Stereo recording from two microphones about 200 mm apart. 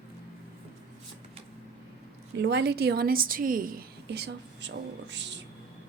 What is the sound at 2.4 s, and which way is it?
A woman's voice, 55° right (ahead or behind).